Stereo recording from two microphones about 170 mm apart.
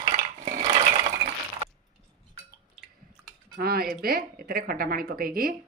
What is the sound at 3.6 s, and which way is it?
Speech, 65° right (ahead or behind).